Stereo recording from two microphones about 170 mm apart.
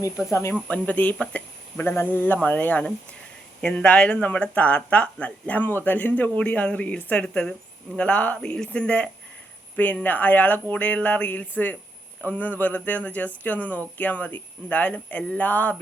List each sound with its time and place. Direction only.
0.2 s speech: 15° left (ahead or behind)